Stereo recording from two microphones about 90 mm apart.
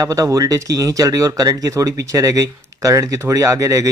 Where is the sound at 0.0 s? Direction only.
40° right (ahead or behind).